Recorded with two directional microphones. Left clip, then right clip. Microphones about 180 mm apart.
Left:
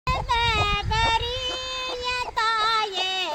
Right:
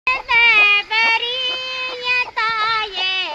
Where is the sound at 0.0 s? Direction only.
15° left (ahead or behind).